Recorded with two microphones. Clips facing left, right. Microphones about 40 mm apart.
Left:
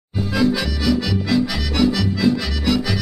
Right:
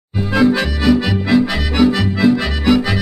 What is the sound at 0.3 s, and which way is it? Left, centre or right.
Accordion, right.